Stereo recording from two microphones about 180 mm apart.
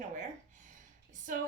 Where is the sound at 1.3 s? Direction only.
50° right (ahead or behind).